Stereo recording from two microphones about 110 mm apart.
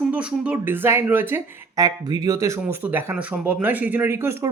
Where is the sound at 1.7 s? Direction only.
35° right (ahead or behind).